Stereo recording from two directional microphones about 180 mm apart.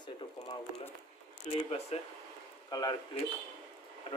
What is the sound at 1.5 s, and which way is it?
Speech, 35° left (ahead or behind).